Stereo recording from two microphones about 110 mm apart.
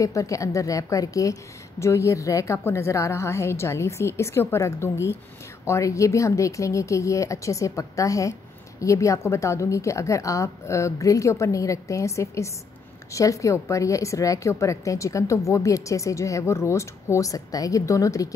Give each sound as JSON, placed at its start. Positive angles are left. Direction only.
{"t": 0.0, "sound": "a woman's voice", "side_deg": 30}